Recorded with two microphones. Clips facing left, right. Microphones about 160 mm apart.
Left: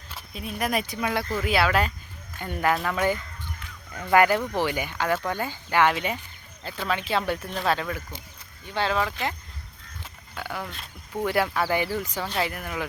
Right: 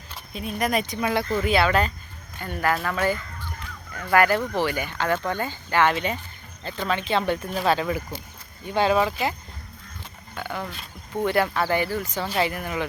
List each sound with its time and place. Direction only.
0.1 s speech: 5° left (ahead or behind)
2.4 s speech: 20° left (ahead or behind); by 7.9 s centre (ahead or behind)
8.7 s speech: 15° right (ahead or behind)
10.3 s speech: 5° left (ahead or behind)
12.2 s speech: centre (ahead or behind)